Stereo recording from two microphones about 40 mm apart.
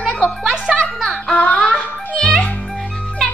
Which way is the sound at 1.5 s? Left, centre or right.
Left.